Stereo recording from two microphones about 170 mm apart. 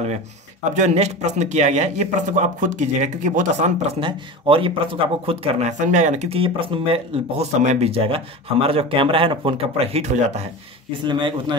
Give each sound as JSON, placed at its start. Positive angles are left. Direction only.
{"t": 0.7, "sound": "speech", "side_deg": -40}
{"t": 11.1, "sound": "speech", "side_deg": -25}